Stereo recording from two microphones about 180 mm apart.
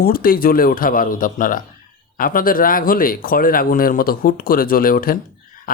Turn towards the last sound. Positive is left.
turn(degrees=55)  # may be behind; listen again after turning